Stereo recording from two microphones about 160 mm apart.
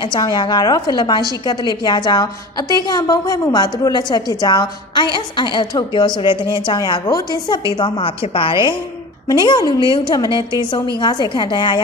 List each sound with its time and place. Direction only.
0.0 s a woman's voice: 25° left (ahead or behind)